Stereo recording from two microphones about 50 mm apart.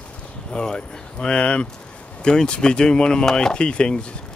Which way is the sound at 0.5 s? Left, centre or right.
Centre.